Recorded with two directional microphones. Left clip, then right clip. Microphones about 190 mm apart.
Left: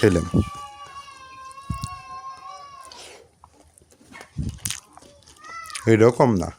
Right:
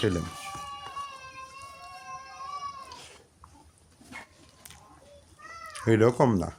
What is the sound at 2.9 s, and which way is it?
Cat, 35° left (ahead or behind).